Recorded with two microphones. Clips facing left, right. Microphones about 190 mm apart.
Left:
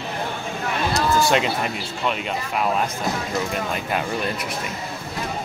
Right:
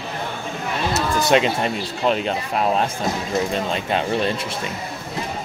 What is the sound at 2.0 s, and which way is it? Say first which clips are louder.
Speech: right 5 dB; 35° right (ahead or behind).